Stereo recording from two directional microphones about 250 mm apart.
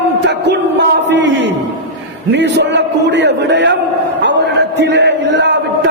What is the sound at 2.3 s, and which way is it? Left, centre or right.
A man's voice, right.